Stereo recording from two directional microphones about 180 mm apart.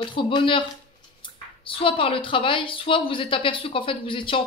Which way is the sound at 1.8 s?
30° left (ahead or behind).